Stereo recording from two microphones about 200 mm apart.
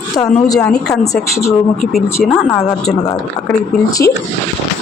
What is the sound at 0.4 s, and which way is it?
Speech, 15° left (ahead or behind).